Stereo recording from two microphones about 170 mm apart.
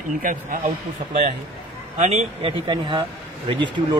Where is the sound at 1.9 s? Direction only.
40° right (ahead or behind).